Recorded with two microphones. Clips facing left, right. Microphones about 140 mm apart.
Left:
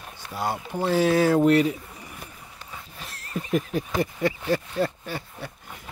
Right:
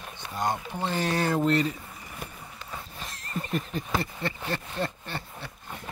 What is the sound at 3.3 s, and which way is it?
Speech, 10° left (ahead or behind).